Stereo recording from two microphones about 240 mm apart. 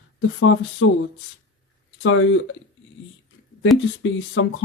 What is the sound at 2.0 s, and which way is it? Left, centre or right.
Speech, left.